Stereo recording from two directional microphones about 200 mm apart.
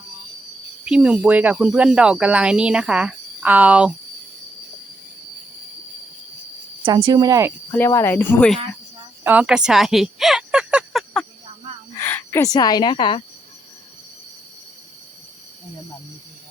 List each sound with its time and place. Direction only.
0.9 s speech: 5° right (ahead or behind)
6.8 s speech: 20° right (ahead or behind)
7.7 s speech: 10° left (ahead or behind)
9.2 s a sound: 5° right (ahead or behind)
11.9 s speech: 10° left (ahead or behind)